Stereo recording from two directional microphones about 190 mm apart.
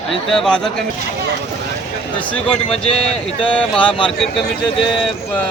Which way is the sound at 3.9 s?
25° left (ahead or behind).